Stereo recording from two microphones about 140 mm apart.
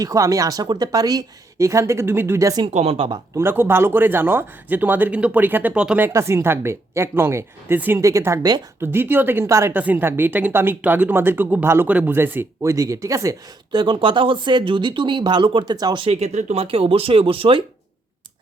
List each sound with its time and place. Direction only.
0.0 s speech: 25° right (ahead or behind)
2.6 s speech: 45° right (ahead or behind)
3.3 s speech: 15° right (ahead or behind)
6.1 s speech: 20° right (ahead or behind)
8.8 s speech: 15° right (ahead or behind)
13.7 s speech: 35° right (ahead or behind)
16.0 s speech: 50° right (ahead or behind)